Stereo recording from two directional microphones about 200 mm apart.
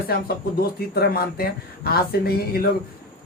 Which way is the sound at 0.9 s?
50° left (ahead or behind).